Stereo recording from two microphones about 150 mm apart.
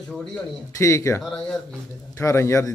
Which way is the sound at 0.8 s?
20° left (ahead or behind).